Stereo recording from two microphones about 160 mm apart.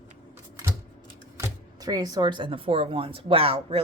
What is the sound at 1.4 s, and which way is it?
A woman's voice, 25° right (ahead or behind).